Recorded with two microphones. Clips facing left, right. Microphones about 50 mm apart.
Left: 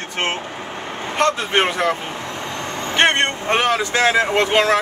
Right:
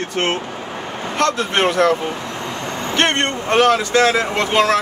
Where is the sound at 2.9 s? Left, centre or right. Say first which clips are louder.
Left 2 dB; left.